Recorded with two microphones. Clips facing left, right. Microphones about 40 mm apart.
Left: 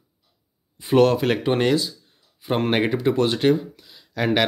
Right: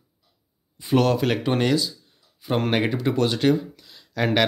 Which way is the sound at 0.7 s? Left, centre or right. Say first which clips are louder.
Left 3 dB; left.